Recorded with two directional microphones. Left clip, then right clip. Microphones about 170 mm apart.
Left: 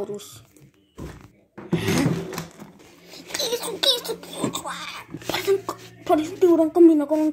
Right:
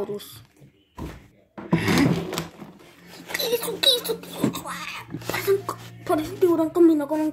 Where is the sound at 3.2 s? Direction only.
10° left (ahead or behind).